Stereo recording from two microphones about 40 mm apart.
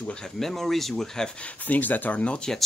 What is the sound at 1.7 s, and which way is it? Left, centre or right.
Speech, left.